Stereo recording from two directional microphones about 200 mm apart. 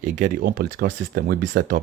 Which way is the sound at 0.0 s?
40° right (ahead or behind).